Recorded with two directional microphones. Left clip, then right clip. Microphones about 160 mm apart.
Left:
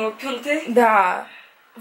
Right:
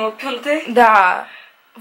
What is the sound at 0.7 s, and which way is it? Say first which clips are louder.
Speech: right 5 dB; 5° left (ahead or behind).